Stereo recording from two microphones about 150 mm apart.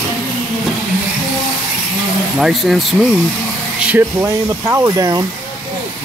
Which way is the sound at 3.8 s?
15° right (ahead or behind).